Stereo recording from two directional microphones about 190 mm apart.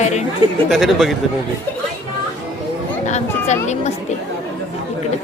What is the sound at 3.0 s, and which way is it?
Speech, 40° left (ahead or behind).